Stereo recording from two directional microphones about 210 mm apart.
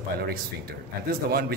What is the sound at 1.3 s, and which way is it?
Speech, 45° right (ahead or behind).